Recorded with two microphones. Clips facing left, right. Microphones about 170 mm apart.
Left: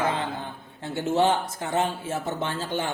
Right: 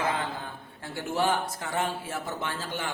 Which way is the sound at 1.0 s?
25° left (ahead or behind).